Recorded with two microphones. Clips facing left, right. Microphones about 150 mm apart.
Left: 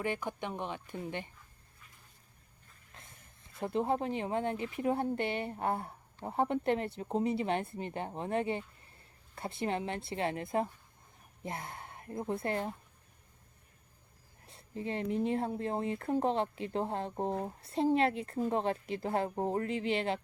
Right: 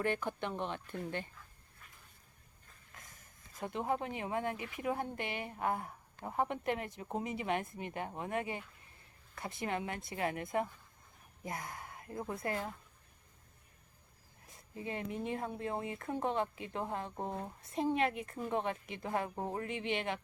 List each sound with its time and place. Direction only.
0.0 s speech: 15° left (ahead or behind)
2.9 s a sound: 25° left (ahead or behind)
3.6 s a woman's voice: 30° left (ahead or behind)
14.4 s speech: 30° left (ahead or behind)